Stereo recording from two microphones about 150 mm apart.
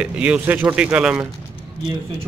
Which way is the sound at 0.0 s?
10° right (ahead or behind).